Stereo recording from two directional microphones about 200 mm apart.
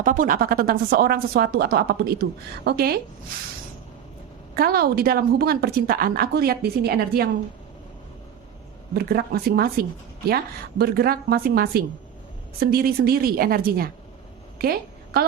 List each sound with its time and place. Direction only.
0.0 s a woman's voice: 40° right (ahead or behind)
4.5 s a woman's voice: 50° right (ahead or behind)
9.0 s a woman's voice: 50° right (ahead or behind)
14.6 s a sound: 50° right (ahead or behind)